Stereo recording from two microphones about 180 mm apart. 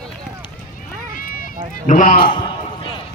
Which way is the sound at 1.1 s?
50° left (ahead or behind).